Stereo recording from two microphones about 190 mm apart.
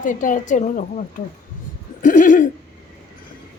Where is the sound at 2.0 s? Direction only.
45° left (ahead or behind).